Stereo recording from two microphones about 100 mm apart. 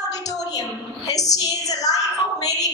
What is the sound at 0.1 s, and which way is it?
A woman's voice, 40° left (ahead or behind).